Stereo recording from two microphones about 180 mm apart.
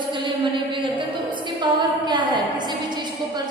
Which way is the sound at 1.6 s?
25° right (ahead or behind).